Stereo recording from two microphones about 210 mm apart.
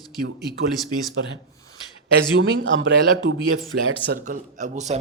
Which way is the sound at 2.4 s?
65° right (ahead or behind).